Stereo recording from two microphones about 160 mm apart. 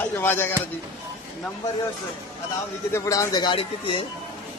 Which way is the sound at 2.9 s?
20° left (ahead or behind).